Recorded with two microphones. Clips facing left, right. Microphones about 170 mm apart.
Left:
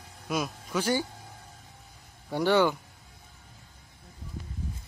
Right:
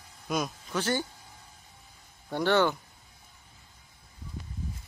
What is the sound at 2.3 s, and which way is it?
Speech, 10° left (ahead or behind).